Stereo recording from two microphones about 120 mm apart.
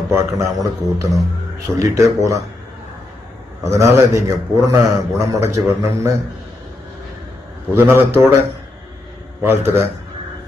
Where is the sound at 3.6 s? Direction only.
25° right (ahead or behind).